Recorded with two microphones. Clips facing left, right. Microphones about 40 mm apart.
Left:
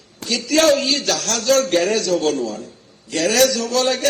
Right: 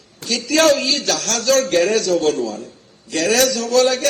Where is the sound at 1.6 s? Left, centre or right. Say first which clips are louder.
Right 1 dB; left.